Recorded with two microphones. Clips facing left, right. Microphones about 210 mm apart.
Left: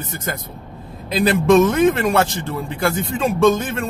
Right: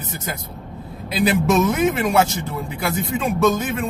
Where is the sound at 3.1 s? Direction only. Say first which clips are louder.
Left 3 dB; 5° right (ahead or behind).